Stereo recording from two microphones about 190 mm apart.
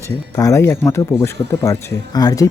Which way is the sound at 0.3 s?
15° left (ahead or behind).